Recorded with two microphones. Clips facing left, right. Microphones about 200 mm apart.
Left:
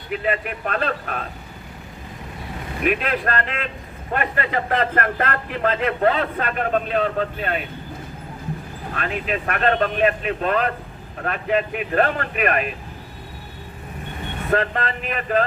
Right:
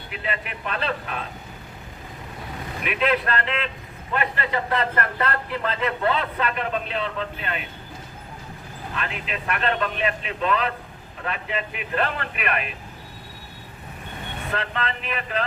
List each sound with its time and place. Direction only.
0.1 s a man's voice: 50° left (ahead or behind)
2.8 s a man's voice: 45° left (ahead or behind)
9.0 s a man's voice: 45° left (ahead or behind)
14.5 s a man's voice: 45° left (ahead or behind)